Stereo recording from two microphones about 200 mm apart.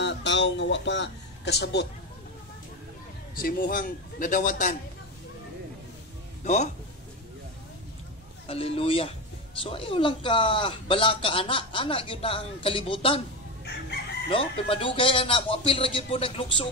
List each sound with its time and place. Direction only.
0.0 s speech: 60° left (ahead or behind)
3.3 s a man's voice: 45° left (ahead or behind)
6.4 s a man's voice: 35° left (ahead or behind)
8.5 s speech: 30° left (ahead or behind)
14.3 s speech: 25° left (ahead or behind)